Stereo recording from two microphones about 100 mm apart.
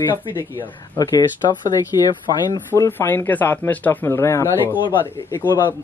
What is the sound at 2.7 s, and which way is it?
Speech, 25° left (ahead or behind).